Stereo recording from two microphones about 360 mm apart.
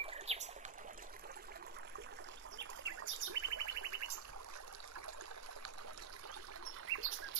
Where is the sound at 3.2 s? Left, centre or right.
Right.